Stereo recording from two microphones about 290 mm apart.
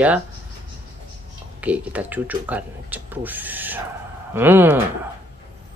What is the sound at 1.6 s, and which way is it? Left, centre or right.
Speech, centre.